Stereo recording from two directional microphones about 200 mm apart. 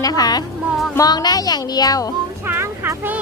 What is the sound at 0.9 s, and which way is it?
Music, 20° left (ahead or behind).